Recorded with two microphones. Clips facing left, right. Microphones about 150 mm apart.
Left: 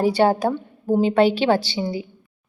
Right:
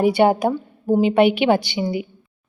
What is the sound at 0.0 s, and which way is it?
A woman's voice, 15° right (ahead or behind).